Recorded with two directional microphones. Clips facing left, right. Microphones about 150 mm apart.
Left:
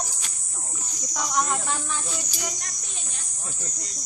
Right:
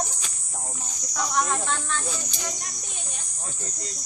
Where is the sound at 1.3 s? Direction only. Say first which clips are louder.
Even; 5° left (ahead or behind).